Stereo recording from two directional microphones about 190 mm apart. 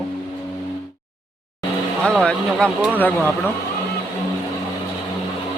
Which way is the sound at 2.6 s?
10° right (ahead or behind).